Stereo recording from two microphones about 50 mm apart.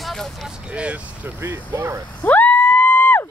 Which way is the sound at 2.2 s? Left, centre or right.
Left.